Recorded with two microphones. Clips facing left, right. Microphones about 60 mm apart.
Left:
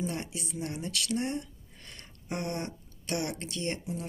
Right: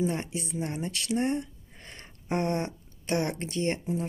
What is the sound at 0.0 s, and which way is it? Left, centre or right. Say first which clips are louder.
Speech: right 5 dB; right.